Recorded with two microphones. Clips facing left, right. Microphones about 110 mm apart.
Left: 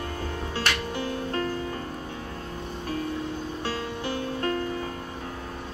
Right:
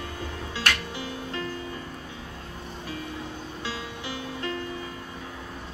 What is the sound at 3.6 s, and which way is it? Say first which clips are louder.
Music: left 3 dB; 50° left (ahead or behind).